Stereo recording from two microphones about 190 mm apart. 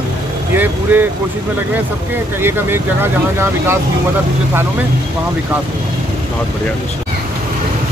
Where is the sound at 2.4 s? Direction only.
10° right (ahead or behind).